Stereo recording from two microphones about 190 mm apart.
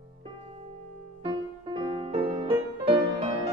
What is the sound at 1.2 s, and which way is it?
Music, 30° right (ahead or behind).